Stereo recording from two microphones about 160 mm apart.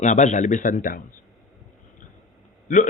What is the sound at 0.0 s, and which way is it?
A man's voice, 50° left (ahead or behind).